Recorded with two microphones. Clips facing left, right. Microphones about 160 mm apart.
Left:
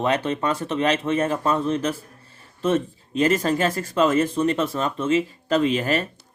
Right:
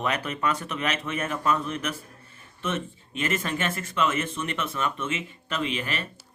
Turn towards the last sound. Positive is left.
turn(degrees=40)  # may be behind; listen again after turning